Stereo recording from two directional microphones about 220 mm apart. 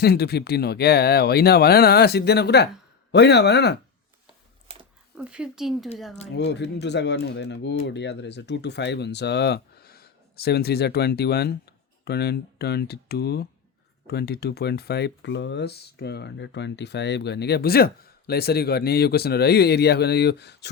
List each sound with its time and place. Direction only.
0.0 s speech: 45° left (ahead or behind)
5.1 s speech: 5° right (ahead or behind)
6.3 s speech: 55° left (ahead or behind)